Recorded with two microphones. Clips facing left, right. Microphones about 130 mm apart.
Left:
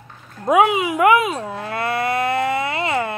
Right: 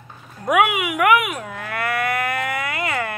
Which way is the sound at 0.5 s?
30° left (ahead or behind).